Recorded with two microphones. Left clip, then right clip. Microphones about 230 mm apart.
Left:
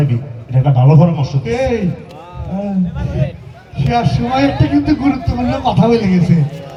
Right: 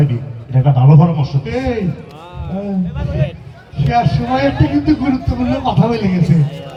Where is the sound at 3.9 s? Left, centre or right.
Left.